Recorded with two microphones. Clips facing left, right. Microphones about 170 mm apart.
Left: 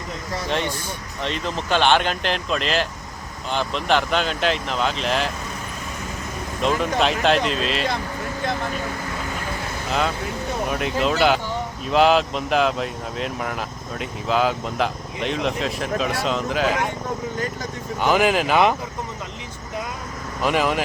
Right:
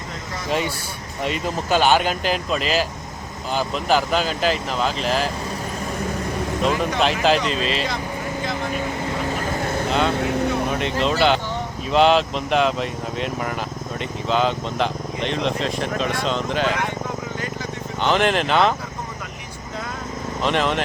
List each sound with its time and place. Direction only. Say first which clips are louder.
1.2 s speech: right 2 dB; 10° right (ahead or behind)
6.6 s speech: left 1 dB; centre (ahead or behind)
10.7 s speech: even; 5° left (ahead or behind)
18.0 s speech: left 1 dB; 5° left (ahead or behind)
20.4 s speech: left 1 dB; 5° left (ahead or behind)